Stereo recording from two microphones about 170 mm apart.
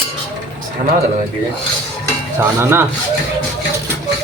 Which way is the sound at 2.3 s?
15° right (ahead or behind).